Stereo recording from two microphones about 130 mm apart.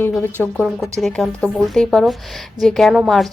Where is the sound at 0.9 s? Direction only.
Centre (ahead or behind).